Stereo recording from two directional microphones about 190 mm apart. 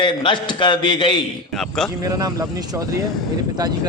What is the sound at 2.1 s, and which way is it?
A man's voice, 20° right (ahead or behind).